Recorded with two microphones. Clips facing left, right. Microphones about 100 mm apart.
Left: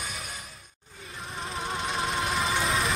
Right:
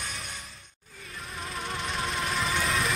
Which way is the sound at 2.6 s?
30° left (ahead or behind).